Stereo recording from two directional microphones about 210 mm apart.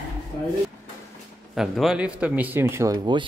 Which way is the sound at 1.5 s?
Centre (ahead or behind).